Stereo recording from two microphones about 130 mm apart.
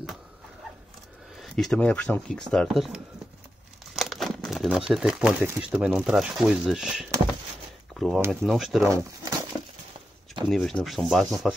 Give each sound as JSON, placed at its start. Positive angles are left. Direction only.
{"t": 1.4, "sound": "speech", "side_deg": 5}
{"t": 3.9, "sound": "crumpling", "side_deg": 0}
{"t": 4.6, "sound": "speech", "side_deg": -5}
{"t": 7.9, "sound": "a sound", "side_deg": 0}
{"t": 8.3, "sound": "speech", "side_deg": 0}
{"t": 8.8, "sound": "speech", "side_deg": -20}
{"t": 10.5, "sound": "speech", "side_deg": 0}